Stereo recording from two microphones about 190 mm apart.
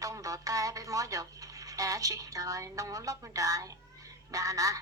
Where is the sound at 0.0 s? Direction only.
15° right (ahead or behind).